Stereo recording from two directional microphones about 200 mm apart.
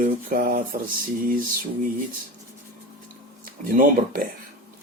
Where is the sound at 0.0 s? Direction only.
45° right (ahead or behind).